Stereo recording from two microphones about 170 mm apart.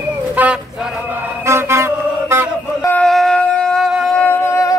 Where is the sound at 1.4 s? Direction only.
15° right (ahead or behind).